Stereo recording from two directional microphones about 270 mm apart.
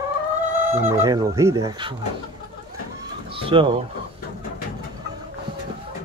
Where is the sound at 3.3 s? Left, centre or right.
Centre.